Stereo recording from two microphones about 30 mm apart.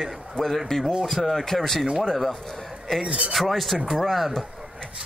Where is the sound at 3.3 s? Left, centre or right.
Centre.